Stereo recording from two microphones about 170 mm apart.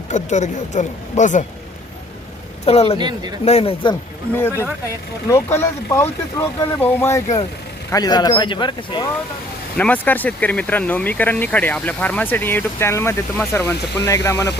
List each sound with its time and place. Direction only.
0.1 s speech: 45° left (ahead or behind)
2.6 s speech: 35° left (ahead or behind)
3.0 s speech: 25° right (ahead or behind)
3.4 s speech: 35° left (ahead or behind)
4.4 s speech: 15° left (ahead or behind)
9.7 s speech: 10° left (ahead or behind)